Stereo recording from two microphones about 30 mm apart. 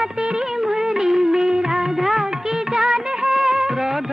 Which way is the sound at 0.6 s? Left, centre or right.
Centre.